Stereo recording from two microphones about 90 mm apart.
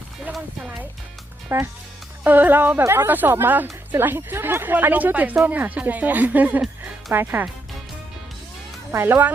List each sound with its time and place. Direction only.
1.5 s speech: 30° right (ahead or behind)
8.9 s speech: 25° right (ahead or behind)